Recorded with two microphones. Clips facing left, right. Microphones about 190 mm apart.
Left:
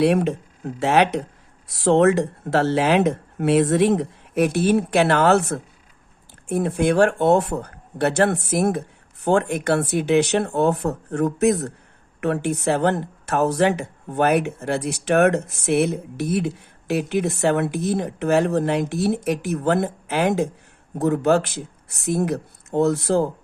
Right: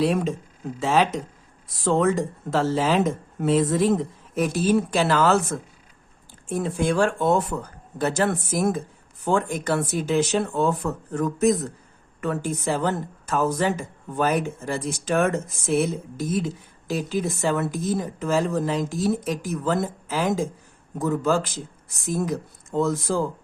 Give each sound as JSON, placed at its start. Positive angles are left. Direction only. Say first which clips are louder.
{"t": 0.0, "sound": "speech", "louder": "left 4 dB", "side_deg": 65}